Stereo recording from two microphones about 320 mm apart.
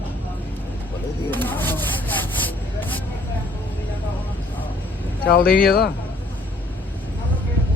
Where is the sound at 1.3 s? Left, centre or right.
Centre.